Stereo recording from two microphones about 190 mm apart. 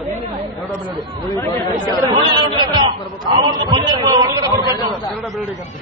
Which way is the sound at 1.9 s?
25° right (ahead or behind).